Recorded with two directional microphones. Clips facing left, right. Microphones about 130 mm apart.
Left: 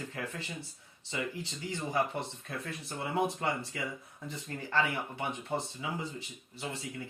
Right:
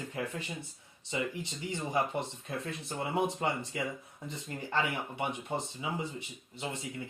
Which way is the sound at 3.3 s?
25° right (ahead or behind).